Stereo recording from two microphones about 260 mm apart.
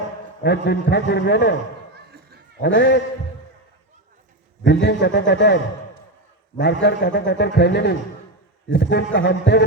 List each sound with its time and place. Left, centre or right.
0.4 s a man's voice: left
2.6 s a man's voice: left
4.6 s a man's voice: left
6.6 s a man's voice: left